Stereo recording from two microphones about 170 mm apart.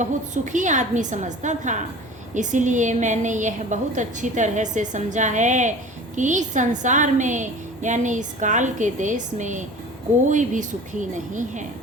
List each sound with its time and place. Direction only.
0.0 s a woman's voice: 45° right (ahead or behind)